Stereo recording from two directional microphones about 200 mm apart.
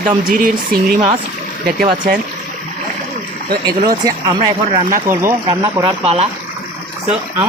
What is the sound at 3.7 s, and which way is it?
Speech, 20° right (ahead or behind).